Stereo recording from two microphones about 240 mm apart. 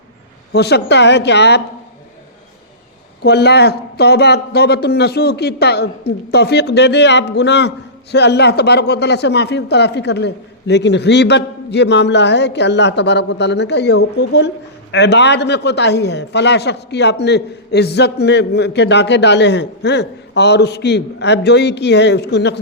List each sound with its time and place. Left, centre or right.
0.5 s a man's voice: left
3.2 s a man's voice: left